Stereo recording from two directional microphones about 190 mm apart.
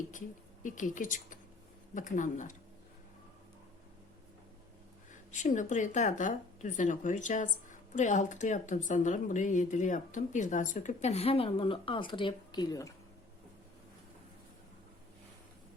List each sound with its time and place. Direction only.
0.6 s speech: 40° left (ahead or behind)
5.1 s speech: 40° left (ahead or behind); by 12.9 s 20° left (ahead or behind)